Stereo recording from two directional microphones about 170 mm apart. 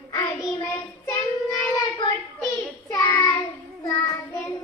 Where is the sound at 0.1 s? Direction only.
20° left (ahead or behind).